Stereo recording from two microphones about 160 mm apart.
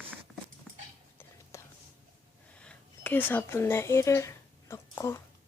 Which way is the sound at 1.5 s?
20° left (ahead or behind).